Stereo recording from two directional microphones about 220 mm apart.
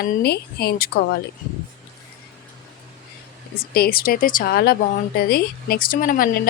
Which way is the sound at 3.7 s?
45° left (ahead or behind).